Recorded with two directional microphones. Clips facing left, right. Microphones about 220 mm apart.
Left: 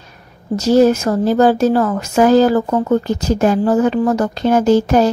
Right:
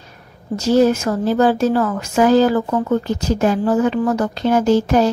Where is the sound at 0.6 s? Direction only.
40° left (ahead or behind).